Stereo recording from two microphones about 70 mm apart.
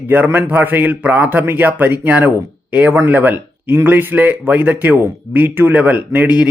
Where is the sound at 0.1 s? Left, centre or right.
Right.